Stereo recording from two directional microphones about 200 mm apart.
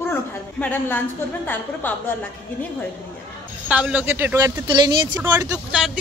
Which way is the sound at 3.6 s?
5° right (ahead or behind).